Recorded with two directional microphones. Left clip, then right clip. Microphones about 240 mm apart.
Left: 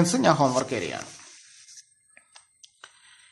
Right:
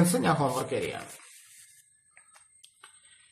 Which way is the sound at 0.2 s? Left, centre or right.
Left.